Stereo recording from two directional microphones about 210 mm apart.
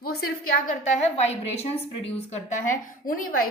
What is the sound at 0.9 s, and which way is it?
A woman's voice, 30° left (ahead or behind).